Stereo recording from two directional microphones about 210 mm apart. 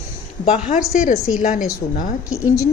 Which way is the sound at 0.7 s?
40° left (ahead or behind).